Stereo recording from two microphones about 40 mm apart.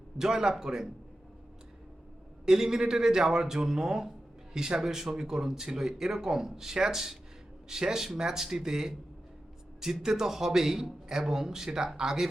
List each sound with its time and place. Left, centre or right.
0.2 s speech: centre
2.5 s speech: centre